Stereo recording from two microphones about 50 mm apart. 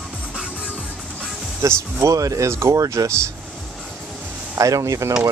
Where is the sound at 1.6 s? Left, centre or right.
Right.